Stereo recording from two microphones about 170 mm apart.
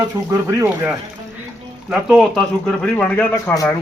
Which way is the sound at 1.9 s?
Centre (ahead or behind).